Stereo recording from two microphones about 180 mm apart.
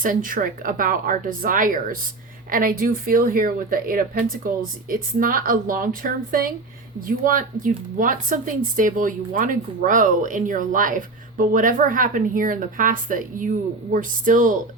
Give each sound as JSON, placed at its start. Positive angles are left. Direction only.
{"t": 0.0, "sound": "speech", "side_deg": -50}